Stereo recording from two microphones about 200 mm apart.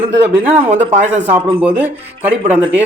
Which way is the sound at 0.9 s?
35° right (ahead or behind).